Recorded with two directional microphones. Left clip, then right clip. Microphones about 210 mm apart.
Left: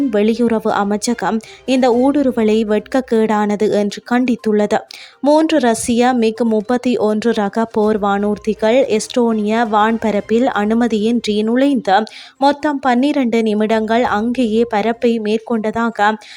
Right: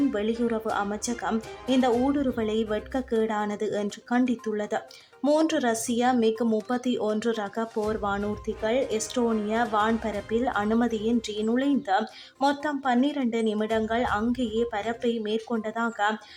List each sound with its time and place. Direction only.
0.1 s speech: 35° left (ahead or behind)